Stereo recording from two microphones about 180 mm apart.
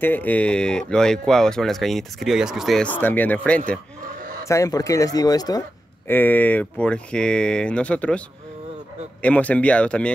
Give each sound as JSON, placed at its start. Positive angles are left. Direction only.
{"t": 0.0, "sound": "speech", "side_deg": 10}
{"t": 4.5, "sound": "speech", "side_deg": 20}
{"t": 9.2, "sound": "speech", "side_deg": 10}